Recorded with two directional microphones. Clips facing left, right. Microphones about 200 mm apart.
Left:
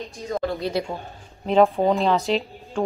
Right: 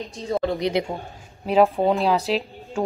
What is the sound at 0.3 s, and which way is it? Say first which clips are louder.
Speech: right 3 dB; 20° right (ahead or behind).